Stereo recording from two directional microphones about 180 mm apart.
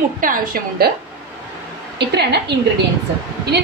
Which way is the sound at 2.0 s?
70° right (ahead or behind).